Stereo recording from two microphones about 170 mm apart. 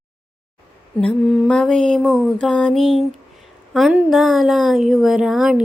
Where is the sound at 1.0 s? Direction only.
5° left (ahead or behind).